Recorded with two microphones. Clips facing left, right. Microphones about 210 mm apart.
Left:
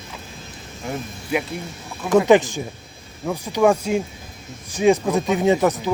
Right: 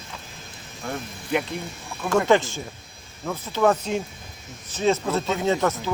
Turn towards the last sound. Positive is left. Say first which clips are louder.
# left 5 dB
turn(degrees=15)  # may be behind; listen again after turning